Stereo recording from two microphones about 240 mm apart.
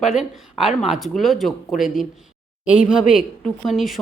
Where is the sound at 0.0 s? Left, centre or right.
Centre.